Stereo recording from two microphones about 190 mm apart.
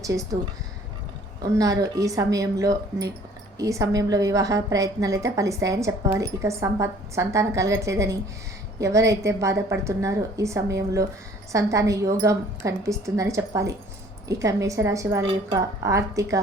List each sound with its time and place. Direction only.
0.0 s a woman's voice: 15° right (ahead or behind)
1.4 s a woman's voice: 20° right (ahead or behind)